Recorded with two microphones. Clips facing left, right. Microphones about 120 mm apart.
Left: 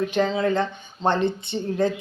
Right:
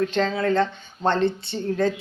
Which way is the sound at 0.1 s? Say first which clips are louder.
Even; 15° left (ahead or behind).